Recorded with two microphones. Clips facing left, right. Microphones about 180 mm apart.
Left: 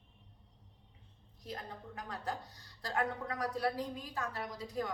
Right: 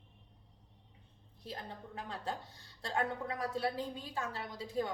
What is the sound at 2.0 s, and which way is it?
A woman's voice, 25° right (ahead or behind).